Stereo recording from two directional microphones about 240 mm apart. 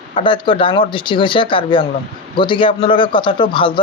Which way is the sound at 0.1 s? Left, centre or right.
Left.